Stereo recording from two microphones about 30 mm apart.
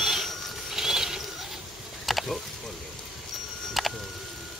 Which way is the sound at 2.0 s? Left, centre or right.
Centre.